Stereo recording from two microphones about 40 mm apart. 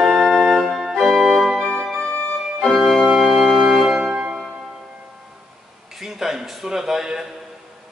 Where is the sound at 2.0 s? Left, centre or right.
Left.